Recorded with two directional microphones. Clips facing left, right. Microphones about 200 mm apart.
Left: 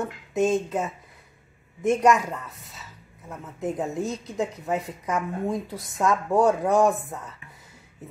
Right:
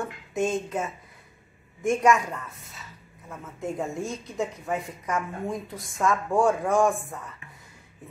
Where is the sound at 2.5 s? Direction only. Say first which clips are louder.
Left 1 dB; centre (ahead or behind).